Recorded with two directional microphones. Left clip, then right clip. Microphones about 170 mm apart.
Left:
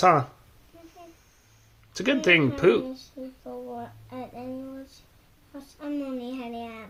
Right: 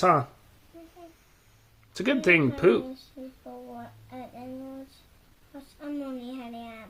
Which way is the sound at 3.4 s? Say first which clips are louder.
Left 6 dB; 45° left (ahead or behind).